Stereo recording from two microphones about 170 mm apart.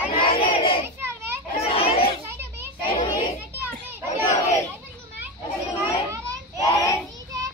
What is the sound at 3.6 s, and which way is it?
Children playing, 10° right (ahead or behind).